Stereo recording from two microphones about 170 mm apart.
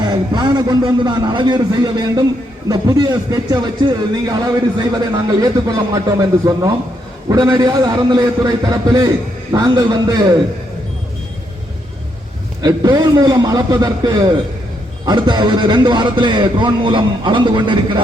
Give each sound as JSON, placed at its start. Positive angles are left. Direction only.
{"t": 0.0, "sound": "speech", "side_deg": -25}
{"t": 12.6, "sound": "speech", "side_deg": -25}